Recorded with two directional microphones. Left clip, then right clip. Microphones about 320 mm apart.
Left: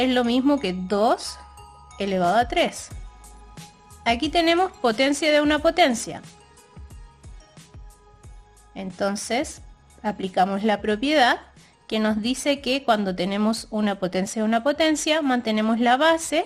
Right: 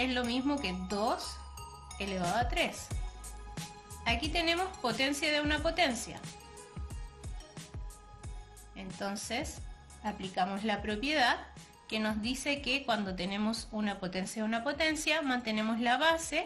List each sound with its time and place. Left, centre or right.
0.0 s a woman's voice: left
4.0 s a woman's voice: left
9.0 s a woman's voice: left